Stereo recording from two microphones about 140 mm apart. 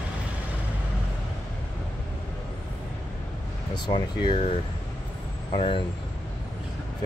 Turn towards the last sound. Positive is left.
turn(degrees=45)  # may be behind; listen again after turning